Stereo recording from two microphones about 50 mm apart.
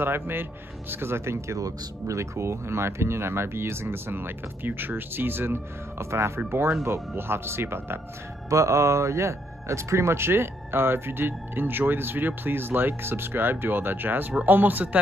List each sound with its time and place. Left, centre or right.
0.0 s speech: right
2.0 s speech: right
8.5 s speech: right